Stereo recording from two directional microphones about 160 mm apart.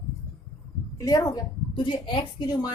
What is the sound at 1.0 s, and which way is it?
A woman's voice, 20° left (ahead or behind).